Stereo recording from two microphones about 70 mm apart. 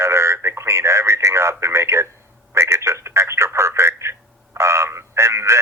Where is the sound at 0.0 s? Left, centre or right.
Right.